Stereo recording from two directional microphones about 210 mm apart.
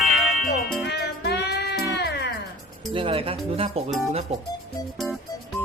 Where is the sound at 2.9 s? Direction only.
25° right (ahead or behind).